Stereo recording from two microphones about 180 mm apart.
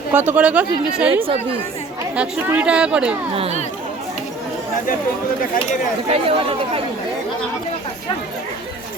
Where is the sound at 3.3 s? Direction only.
35° right (ahead or behind).